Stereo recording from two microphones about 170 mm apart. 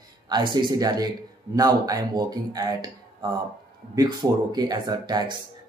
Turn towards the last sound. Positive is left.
turn(degrees=-25)  # may be behind; listen again after turning